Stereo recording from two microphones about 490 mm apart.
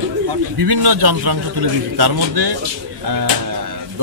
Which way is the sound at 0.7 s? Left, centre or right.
Right.